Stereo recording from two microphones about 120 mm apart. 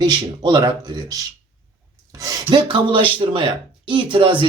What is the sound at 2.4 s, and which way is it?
Speech, 45° right (ahead or behind).